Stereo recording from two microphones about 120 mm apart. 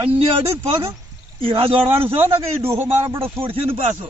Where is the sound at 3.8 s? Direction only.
80° right.